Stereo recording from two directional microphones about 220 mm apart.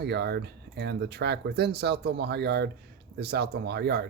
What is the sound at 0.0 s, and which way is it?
Speech, 50° right (ahead or behind).